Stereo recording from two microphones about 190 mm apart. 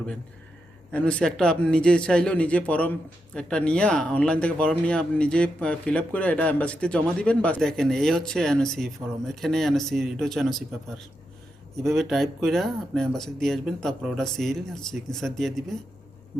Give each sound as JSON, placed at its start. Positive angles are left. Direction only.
{"t": 0.9, "sound": "speech", "side_deg": 5}